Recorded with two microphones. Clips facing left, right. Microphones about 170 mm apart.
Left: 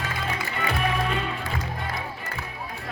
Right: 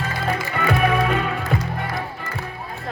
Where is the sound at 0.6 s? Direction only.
60° right (ahead or behind).